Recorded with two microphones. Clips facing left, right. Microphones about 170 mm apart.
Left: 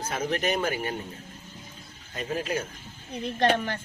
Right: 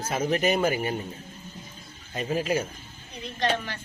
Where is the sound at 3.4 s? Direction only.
50° left (ahead or behind).